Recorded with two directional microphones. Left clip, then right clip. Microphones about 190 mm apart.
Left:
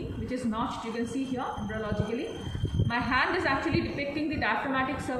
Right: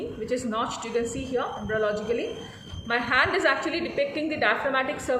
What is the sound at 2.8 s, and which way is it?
A woman's voice, 50° right (ahead or behind).